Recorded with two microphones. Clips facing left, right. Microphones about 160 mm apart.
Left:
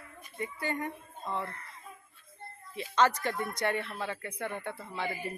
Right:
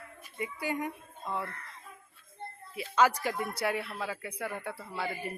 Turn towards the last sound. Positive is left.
turn(degrees=-5)  # may be behind; listen again after turning